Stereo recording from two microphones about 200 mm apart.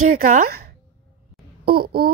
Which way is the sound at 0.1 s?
40° right (ahead or behind).